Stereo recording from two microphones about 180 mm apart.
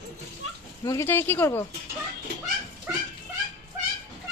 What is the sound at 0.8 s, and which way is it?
Speech, 15° left (ahead or behind).